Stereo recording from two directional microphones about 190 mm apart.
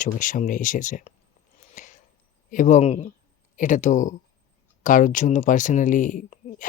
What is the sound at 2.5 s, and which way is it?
Speech, 40° left (ahead or behind).